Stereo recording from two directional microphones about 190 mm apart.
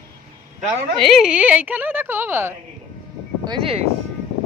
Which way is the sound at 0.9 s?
Centre (ahead or behind).